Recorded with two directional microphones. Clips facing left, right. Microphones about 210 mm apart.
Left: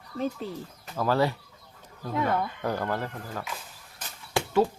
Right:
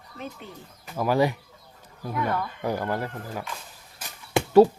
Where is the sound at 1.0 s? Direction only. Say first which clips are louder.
Right 2 dB; 15° right (ahead or behind).